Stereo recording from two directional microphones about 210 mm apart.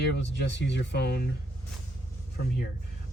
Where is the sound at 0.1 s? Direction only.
55° left (ahead or behind).